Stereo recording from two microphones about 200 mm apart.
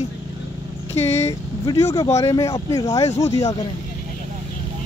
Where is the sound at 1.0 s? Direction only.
15° left (ahead or behind).